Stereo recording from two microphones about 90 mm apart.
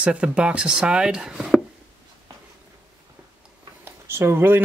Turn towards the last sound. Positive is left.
turn(degrees=-30)  # may be behind; listen again after turning